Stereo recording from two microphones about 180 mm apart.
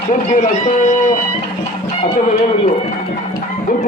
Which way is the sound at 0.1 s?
45° left (ahead or behind).